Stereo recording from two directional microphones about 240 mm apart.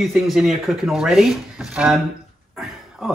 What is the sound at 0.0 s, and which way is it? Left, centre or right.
Speech, centre.